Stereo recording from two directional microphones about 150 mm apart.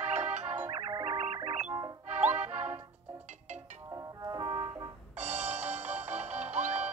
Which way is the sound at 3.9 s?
25° right (ahead or behind).